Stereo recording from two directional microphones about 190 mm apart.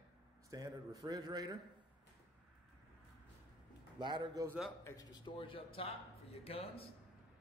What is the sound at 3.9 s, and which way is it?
Speech, 25° right (ahead or behind).